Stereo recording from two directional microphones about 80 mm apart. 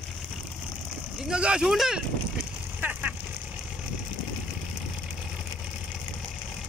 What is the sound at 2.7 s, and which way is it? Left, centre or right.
Vehicle, right.